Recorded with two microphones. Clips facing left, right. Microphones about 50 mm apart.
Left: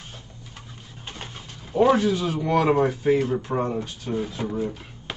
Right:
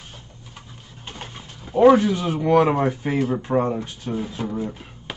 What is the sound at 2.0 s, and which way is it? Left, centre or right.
Speech, right.